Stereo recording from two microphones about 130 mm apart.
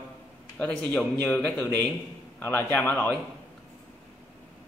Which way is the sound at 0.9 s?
10° left (ahead or behind).